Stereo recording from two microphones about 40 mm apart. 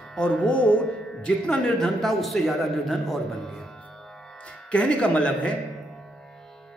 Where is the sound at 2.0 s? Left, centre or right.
Centre.